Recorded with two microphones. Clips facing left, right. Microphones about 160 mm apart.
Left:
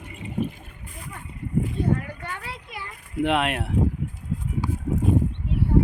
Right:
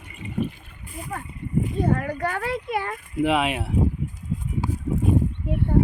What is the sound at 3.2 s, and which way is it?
Speech, centre (ahead or behind).